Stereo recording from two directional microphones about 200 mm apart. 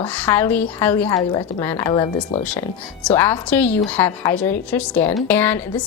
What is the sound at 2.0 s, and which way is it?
Speech, 30° left (ahead or behind).